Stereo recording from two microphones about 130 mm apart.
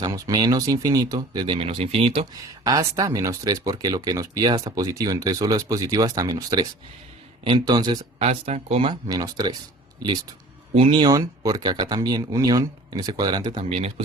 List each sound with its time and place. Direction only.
0.0 s speech: 30° right (ahead or behind); by 2.2 s 45° right (ahead or behind)
2.3 s speech: 30° right (ahead or behind)
8.2 s speech: 55° right (ahead or behind)
9.0 s speech: 30° right (ahead or behind); by 13.9 s 50° right (ahead or behind)